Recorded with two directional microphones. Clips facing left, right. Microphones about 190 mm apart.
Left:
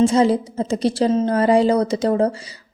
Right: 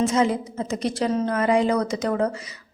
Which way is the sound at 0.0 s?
30° left (ahead or behind).